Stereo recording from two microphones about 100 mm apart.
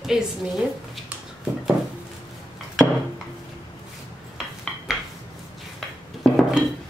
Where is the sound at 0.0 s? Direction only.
5° right (ahead or behind).